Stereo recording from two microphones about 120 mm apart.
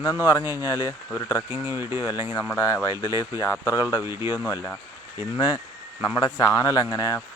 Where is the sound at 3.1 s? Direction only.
25° right (ahead or behind).